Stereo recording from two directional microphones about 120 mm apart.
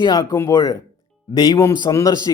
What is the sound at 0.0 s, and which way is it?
A man's voice, 35° left (ahead or behind).